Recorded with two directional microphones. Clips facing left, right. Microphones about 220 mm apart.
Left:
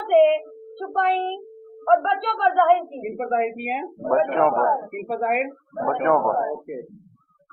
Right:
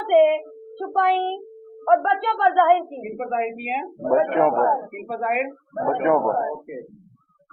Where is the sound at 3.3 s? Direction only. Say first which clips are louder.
Left 2 dB; 45° left (ahead or behind).